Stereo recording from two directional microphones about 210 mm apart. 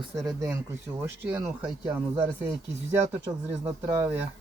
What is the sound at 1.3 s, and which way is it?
Speech, 5° right (ahead or behind).